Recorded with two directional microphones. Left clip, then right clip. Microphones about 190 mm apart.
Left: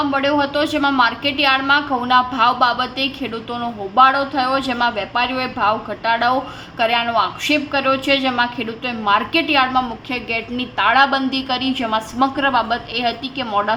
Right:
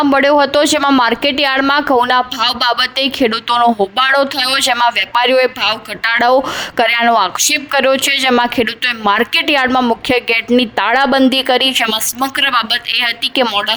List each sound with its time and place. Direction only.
0.1 s speech: 60° right (ahead or behind)